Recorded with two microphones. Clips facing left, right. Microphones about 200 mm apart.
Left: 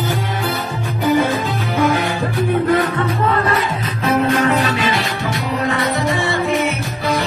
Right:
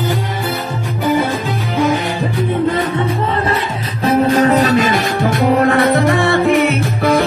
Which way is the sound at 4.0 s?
30° right (ahead or behind).